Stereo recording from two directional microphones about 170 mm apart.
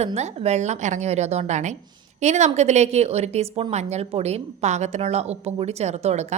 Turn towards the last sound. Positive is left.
turn(degrees=-40)  # may be behind; listen again after turning